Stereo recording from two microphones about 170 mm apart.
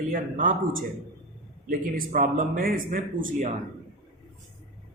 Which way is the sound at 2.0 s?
55° right (ahead or behind).